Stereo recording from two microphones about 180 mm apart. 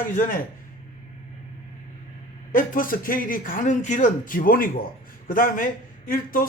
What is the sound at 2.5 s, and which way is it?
A man's voice, 50° left (ahead or behind).